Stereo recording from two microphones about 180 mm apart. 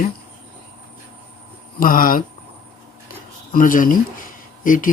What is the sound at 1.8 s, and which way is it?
Speech, 50° left (ahead or behind).